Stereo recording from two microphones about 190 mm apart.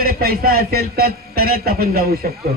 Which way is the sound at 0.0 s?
50° right (ahead or behind).